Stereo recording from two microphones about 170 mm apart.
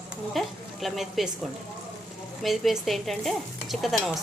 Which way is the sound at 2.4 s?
Centre (ahead or behind).